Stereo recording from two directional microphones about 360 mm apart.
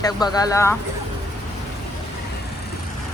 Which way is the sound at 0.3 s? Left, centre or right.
Centre.